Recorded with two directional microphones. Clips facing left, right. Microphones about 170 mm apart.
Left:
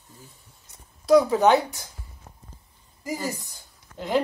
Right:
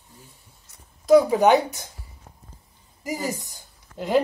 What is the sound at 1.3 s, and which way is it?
Speech, 15° right (ahead or behind).